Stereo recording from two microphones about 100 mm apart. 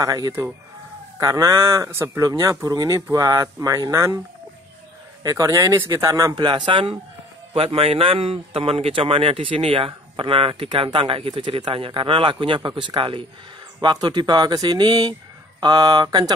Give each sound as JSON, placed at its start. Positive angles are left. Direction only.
{"t": 0.0, "sound": "speech", "side_deg": -40}
{"t": 5.2, "sound": "speech", "side_deg": -35}
{"t": 6.3, "sound": "speech", "side_deg": -50}
{"t": 7.5, "sound": "a man's voice", "side_deg": -70}